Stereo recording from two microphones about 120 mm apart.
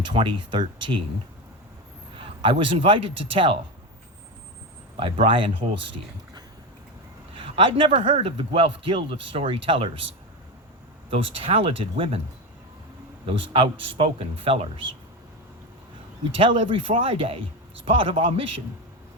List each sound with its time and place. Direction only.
0.0 s speech: 40° right (ahead or behind)
2.1 s speech: 45° right (ahead or behind)
5.2 s a man's voice: 45° right (ahead or behind)
7.3 s a man's voice: 45° right (ahead or behind)
11.1 s a man's voice: 50° right (ahead or behind)
13.2 s a man's voice: 50° right (ahead or behind)
16.4 s a man's voice: 45° right (ahead or behind)